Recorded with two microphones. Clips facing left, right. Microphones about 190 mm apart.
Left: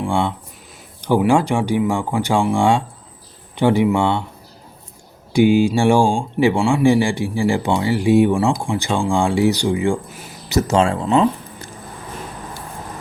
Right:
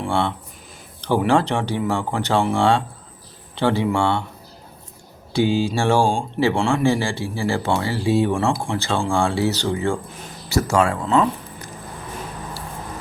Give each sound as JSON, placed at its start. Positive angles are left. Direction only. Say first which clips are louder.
{"t": 0.1, "sound": "speech", "louder": "left 2 dB", "side_deg": 15}
{"t": 5.3, "sound": "speech", "louder": "left 6 dB", "side_deg": 15}